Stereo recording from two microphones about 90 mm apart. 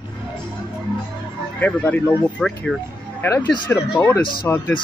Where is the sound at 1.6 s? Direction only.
20° left (ahead or behind).